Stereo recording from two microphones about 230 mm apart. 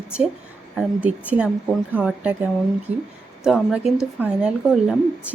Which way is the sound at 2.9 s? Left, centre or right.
Right.